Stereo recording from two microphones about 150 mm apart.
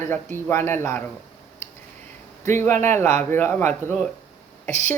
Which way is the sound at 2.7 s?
50° right (ahead or behind).